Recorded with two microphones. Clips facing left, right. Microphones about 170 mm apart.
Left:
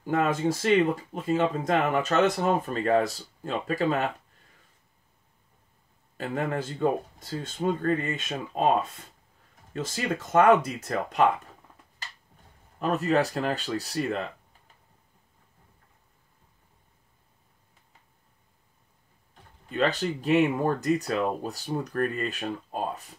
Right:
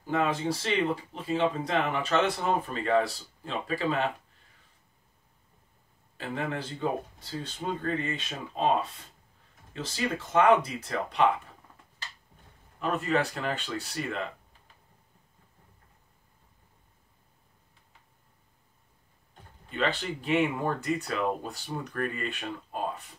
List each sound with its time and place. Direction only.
0.0 s speech: 50° left (ahead or behind)
6.1 s speech: 45° left (ahead or behind)
9.8 s speech: 45° left (ahead or behind)
12.7 s speech: 40° left (ahead or behind)
19.7 s speech: 40° left (ahead or behind)